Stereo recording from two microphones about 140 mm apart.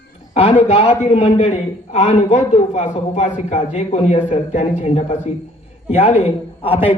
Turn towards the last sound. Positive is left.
turn(degrees=45)  # may be behind; listen again after turning